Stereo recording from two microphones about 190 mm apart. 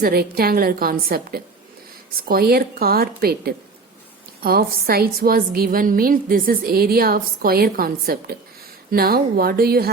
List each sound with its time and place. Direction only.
0.0 s a woman's voice: 55° right (ahead or behind)